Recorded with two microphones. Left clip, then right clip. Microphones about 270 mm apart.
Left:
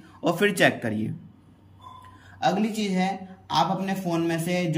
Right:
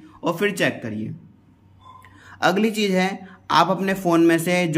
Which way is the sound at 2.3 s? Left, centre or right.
Centre.